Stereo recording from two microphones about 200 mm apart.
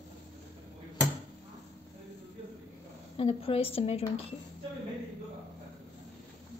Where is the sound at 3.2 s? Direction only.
30° left (ahead or behind).